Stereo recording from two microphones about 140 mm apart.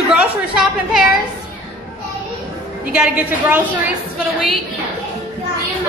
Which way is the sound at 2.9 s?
10° right (ahead or behind).